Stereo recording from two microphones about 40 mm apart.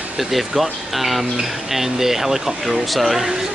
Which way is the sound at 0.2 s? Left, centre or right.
Centre.